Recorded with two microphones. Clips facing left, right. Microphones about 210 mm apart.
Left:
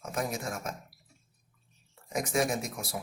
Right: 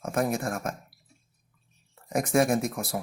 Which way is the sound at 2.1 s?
55° right (ahead or behind).